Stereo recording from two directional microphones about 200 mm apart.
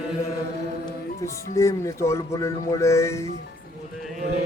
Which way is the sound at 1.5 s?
15° left (ahead or behind).